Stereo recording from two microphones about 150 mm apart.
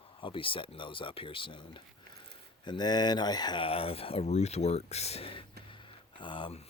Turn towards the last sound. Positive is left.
turn(degrees=35)  # may be behind; listen again after turning